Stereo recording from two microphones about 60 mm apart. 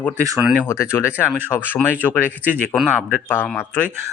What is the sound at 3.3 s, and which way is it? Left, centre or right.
Speech, left.